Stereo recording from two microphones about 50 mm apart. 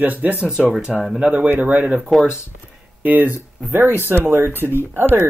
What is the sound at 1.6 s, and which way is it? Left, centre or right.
Speech, right.